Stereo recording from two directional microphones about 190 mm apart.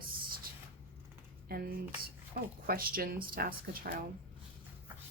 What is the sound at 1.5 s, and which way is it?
Speech, 50° right (ahead or behind).